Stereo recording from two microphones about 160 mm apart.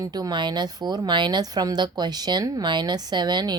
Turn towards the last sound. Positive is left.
turn(degrees=-25)  # may be behind; listen again after turning